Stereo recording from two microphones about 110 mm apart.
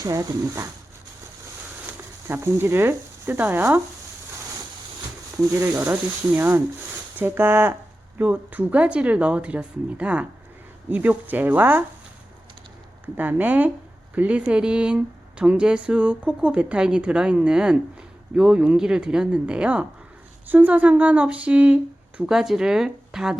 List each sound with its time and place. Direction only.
0.0 s speech: 30° right (ahead or behind)
1.9 s speech: 25° right (ahead or behind)
5.5 s speech: 25° right (ahead or behind)
13.1 s speech: 15° right (ahead or behind)